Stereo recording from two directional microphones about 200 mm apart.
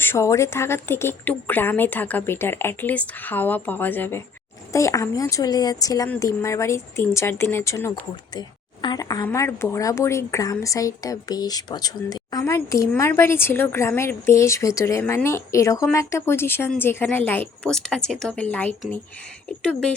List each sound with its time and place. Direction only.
0.0 s a woman's voice: 10° left (ahead or behind)